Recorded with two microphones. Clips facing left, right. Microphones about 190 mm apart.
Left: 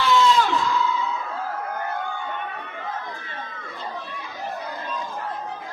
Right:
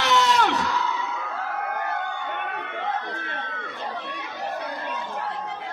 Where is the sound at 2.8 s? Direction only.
70° right (ahead or behind).